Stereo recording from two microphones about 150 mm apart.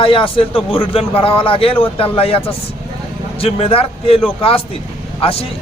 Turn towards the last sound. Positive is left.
turn(degrees=40)  # may be behind; listen again after turning